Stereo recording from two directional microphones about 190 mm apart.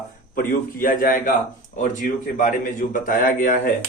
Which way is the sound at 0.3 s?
45° left (ahead or behind).